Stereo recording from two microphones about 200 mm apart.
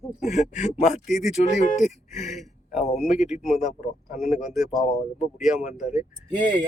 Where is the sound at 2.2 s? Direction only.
Centre (ahead or behind).